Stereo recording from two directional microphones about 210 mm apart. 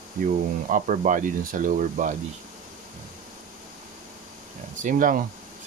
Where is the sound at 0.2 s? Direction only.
40° right (ahead or behind).